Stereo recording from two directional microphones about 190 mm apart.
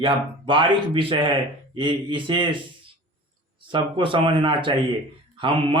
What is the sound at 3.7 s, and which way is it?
Speech, 25° right (ahead or behind).